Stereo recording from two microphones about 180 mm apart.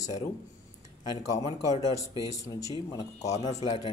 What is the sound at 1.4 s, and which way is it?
Speech, 20° right (ahead or behind).